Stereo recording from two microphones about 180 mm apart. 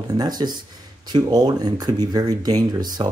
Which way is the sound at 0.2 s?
20° right (ahead or behind).